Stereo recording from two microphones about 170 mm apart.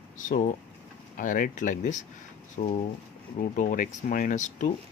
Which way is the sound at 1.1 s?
50° left (ahead or behind).